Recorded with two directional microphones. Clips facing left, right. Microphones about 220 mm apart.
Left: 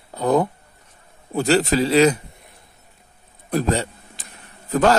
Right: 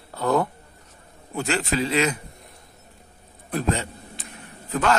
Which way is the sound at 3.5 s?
35° left (ahead or behind).